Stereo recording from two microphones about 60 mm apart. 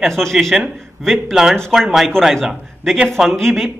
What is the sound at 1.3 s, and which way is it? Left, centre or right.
Speech, centre.